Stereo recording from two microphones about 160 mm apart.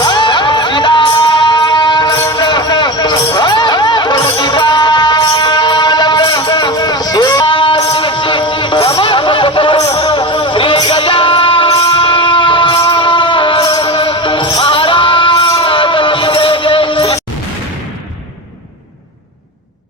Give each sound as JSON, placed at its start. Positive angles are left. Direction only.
{"t": 0.0, "sound": "music", "side_deg": 30}
{"t": 7.9, "sound": "a sound", "side_deg": 30}
{"t": 9.8, "sound": "music", "side_deg": 20}
{"t": 10.1, "sound": "music", "side_deg": 30}